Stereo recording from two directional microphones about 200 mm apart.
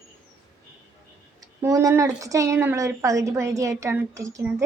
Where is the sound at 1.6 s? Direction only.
15° right (ahead or behind).